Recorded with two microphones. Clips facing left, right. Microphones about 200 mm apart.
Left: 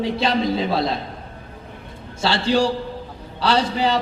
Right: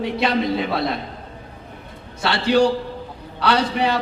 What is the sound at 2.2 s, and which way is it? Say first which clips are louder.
Speech: right 1 dB; 30° left (ahead or behind).